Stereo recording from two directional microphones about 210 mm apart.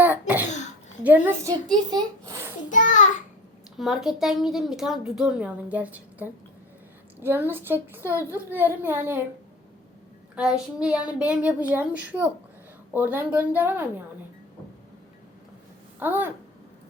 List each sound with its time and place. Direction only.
0.0 s cough: 10° right (ahead or behind)
1.0 s a woman's voice: 10° right (ahead or behind)
1.9 s a sound: 20° right (ahead or behind)
2.6 s a sound: 35° left (ahead or behind)
3.8 s a woman's voice: centre (ahead or behind)
10.3 s a woman's voice: 5° right (ahead or behind)
16.0 s speech: 10° right (ahead or behind)